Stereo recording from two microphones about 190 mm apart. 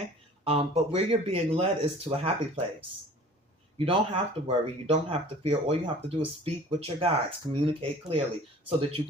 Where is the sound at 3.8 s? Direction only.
30° right (ahead or behind).